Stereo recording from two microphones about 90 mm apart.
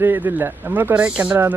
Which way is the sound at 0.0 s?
20° right (ahead or behind).